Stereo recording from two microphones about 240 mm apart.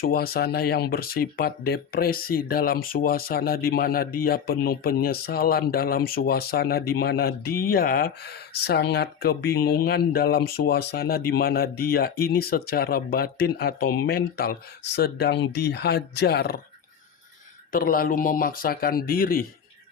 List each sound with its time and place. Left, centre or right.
0.0 s speech: left
17.7 s speech: left